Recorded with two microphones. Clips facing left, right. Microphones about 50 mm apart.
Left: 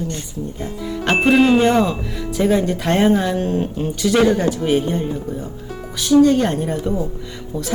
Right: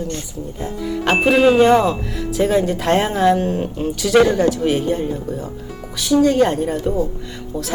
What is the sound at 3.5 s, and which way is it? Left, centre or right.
Speech, right.